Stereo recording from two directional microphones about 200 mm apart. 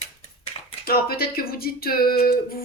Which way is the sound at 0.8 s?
50° left (ahead or behind).